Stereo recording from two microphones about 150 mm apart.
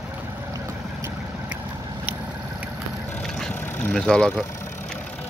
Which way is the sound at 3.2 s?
5° left (ahead or behind).